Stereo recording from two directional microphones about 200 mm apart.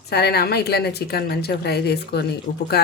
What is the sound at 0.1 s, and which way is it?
Speech, 55° left (ahead or behind).